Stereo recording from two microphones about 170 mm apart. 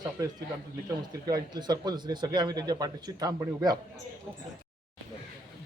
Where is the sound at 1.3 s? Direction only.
25° right (ahead or behind).